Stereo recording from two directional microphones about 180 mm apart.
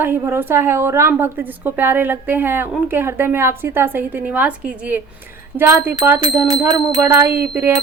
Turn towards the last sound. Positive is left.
turn(degrees=-15)  # may be behind; listen again after turning